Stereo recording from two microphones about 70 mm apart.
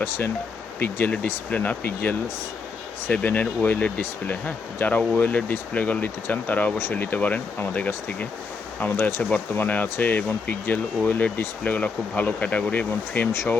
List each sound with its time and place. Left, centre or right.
0.8 s speech: left
9.0 s speech: left
9.3 s speech: left